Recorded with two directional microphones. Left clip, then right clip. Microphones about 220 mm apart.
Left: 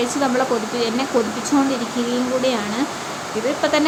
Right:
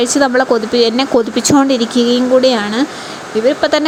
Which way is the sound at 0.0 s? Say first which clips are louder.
Right 7 dB; 30° right (ahead or behind).